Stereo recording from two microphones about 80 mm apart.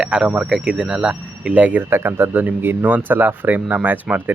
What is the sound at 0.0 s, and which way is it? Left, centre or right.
Speech, centre.